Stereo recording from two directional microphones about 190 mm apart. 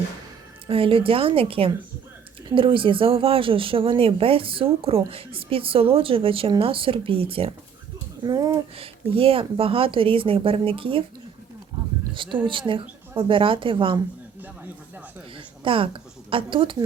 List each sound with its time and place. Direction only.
0.7 s speech: 30° right (ahead or behind)
8.2 s speech: 20° right (ahead or behind)
8.7 s speech: 30° right (ahead or behind)
12.1 s speech: 25° right (ahead or behind)
15.4 s speech: 25° right (ahead or behind)